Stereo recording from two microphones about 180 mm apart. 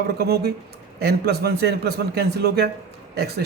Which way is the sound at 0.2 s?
60° right (ahead or behind).